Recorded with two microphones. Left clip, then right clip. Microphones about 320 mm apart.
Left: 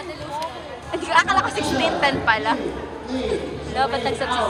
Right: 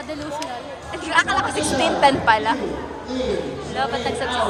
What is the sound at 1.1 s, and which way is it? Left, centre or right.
A woman's voice, centre.